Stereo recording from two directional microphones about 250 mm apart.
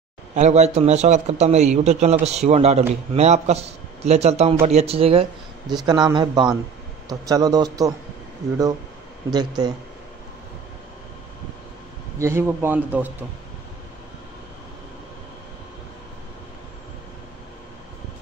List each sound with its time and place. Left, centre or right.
0.3 s a man's voice: right
9.3 s a man's voice: centre
12.2 s a man's voice: centre